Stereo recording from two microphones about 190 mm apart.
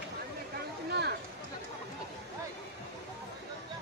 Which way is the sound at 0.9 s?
60° right (ahead or behind).